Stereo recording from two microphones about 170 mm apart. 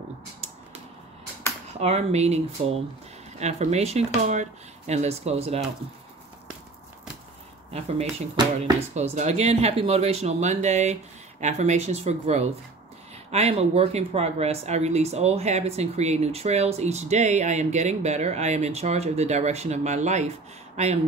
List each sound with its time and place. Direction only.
1.7 s speech: 40° right (ahead or behind)
8.9 s speech: 40° right (ahead or behind)